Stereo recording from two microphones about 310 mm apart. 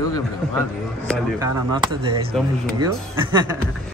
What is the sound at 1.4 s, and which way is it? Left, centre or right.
Speech, centre.